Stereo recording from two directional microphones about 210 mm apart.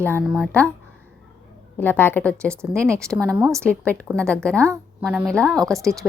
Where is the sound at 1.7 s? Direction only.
10° left (ahead or behind).